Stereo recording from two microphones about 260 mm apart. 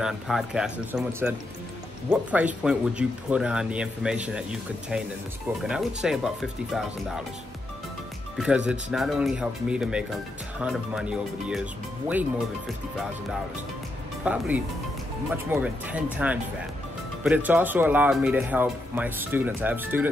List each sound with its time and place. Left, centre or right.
0.0 s speech: centre
8.4 s speech: centre
14.2 s speech: centre